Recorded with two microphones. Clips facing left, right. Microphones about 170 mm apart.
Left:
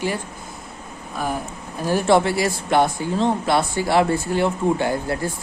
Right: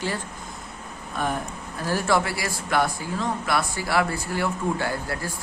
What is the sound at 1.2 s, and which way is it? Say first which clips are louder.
Speech: left 1 dB; centre (ahead or behind).